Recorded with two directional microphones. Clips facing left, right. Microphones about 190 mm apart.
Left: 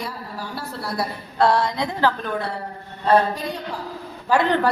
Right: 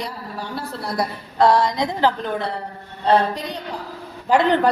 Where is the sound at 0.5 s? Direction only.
15° right (ahead or behind).